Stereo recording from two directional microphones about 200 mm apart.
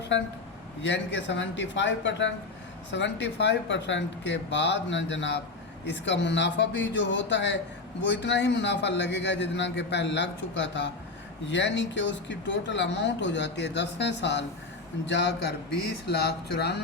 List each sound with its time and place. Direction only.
0.8 s speech: 65° left (ahead or behind)